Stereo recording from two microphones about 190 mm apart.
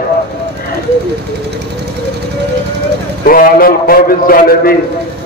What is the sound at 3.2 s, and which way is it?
A man's voice, 50° left (ahead or behind).